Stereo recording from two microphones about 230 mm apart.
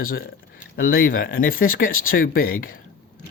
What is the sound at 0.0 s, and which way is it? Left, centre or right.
Speech, left.